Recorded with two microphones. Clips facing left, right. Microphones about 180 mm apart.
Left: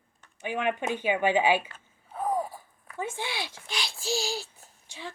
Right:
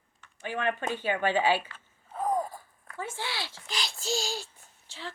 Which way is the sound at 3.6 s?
Centre (ahead or behind).